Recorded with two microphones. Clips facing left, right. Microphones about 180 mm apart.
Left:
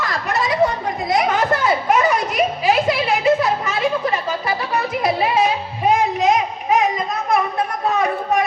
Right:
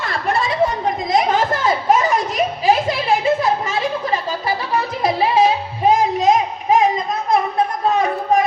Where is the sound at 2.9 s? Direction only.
25° right (ahead or behind).